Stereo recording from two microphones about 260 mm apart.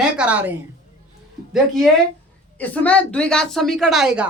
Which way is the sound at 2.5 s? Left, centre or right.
Centre.